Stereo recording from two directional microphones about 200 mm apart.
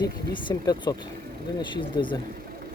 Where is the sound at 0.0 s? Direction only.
20° left (ahead or behind).